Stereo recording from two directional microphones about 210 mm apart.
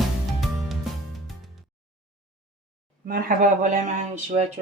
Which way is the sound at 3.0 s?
40° right (ahead or behind).